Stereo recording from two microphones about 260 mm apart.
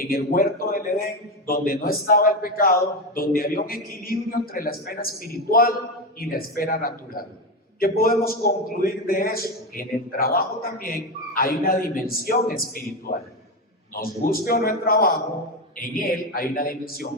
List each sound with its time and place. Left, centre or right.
0.0 s a man's voice: left
13.9 s a man's voice: left